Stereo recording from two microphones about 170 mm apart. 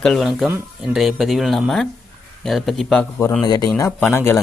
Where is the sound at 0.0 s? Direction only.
Centre (ahead or behind).